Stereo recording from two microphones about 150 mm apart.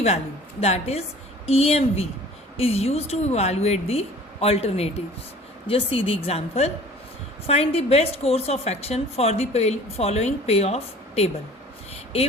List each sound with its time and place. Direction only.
0.6 s a woman's voice: 45° left (ahead or behind)